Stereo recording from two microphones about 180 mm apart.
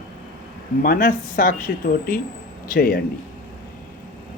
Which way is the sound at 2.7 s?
55° left (ahead or behind).